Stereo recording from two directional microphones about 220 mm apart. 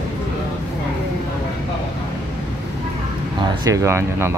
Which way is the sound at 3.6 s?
15° right (ahead or behind).